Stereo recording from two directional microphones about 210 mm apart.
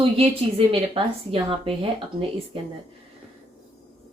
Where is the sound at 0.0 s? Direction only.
25° right (ahead or behind).